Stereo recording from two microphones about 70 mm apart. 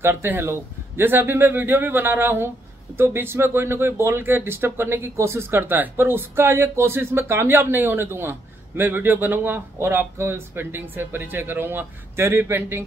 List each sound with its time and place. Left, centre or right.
0.0 s speech: right